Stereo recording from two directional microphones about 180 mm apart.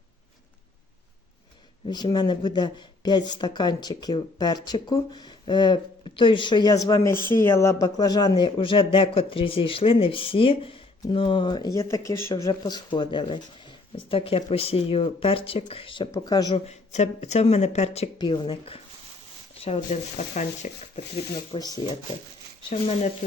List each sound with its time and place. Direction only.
1.9 s speech: 25° left (ahead or behind)
16.6 s speech: 40° left (ahead or behind)
18.2 s speech: 25° left (ahead or behind); by 21.0 s 40° left (ahead or behind)
21.5 s speech: 25° left (ahead or behind)